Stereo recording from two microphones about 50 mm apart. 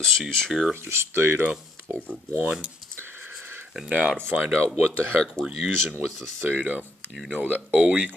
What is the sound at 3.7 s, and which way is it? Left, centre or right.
Speech, centre.